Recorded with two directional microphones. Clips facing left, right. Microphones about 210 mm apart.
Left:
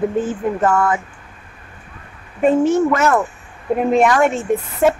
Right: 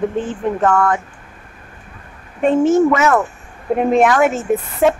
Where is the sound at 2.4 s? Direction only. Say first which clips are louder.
Right 1 dB; centre (ahead or behind).